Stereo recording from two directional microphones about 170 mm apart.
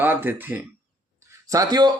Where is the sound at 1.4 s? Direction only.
20° right (ahead or behind).